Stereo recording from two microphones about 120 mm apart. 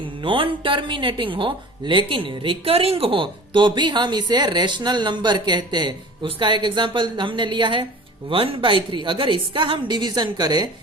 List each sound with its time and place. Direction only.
0.2 s a woman's voice: 45° right (ahead or behind)